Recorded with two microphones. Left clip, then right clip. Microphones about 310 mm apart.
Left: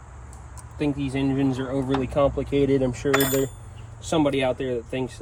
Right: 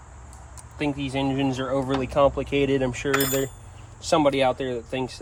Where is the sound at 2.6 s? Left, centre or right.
Centre.